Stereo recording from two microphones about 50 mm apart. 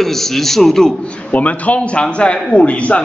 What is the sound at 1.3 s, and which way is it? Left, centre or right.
A man's voice, left.